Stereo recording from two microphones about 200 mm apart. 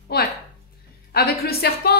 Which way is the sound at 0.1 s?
50° left (ahead or behind).